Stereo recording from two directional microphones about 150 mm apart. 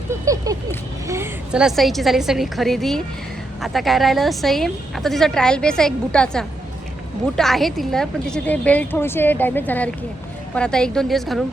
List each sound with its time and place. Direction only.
0.5 s a woman's voice: 25° right (ahead or behind)
1.5 s a woman's voice: centre (ahead or behind)